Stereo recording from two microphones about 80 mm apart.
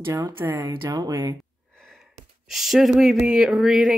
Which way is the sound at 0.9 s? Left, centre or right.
Right.